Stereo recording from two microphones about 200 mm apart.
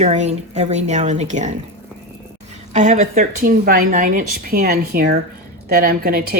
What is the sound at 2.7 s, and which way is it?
A woman's voice, 35° right (ahead or behind).